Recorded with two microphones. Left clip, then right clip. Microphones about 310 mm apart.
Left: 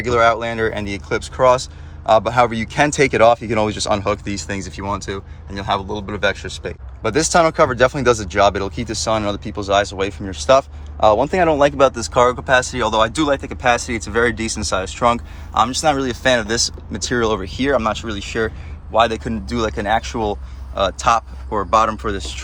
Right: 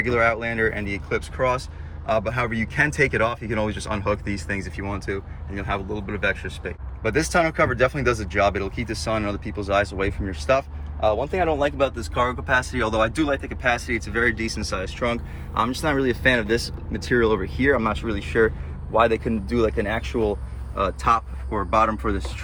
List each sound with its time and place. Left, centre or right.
0.0 s speech: centre
18.9 s speech: left
20.8 s speech: centre